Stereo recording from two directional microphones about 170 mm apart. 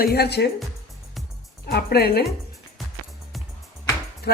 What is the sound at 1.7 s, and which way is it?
Music, 70° left (ahead or behind).